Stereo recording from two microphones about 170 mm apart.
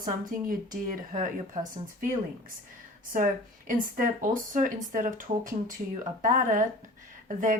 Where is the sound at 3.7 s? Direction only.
55° right (ahead or behind).